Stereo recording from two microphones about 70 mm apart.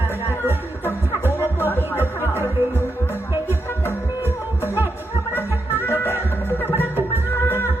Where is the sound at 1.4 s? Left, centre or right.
Left.